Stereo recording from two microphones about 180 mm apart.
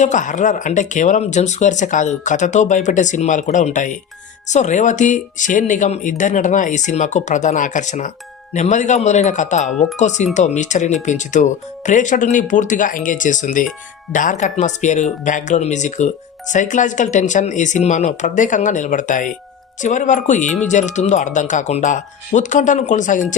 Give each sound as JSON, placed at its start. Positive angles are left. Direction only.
{"t": 0.0, "sound": "speech", "side_deg": 45}